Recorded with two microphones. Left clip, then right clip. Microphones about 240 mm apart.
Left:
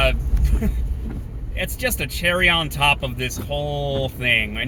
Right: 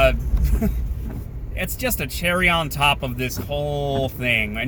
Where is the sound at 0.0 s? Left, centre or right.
Centre.